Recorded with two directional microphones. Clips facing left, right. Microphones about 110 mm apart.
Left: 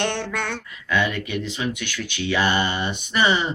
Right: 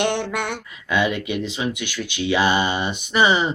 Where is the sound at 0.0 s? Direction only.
15° right (ahead or behind).